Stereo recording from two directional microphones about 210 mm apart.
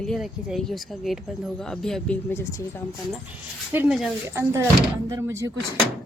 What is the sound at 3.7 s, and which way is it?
Speech, 5° right (ahead or behind).